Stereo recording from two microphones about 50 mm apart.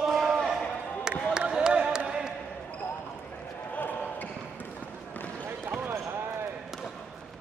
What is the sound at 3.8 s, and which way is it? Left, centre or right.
Basketball bounce, left.